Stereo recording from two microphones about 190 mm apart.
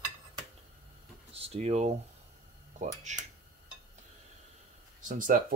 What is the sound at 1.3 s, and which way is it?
Speech, 30° right (ahead or behind).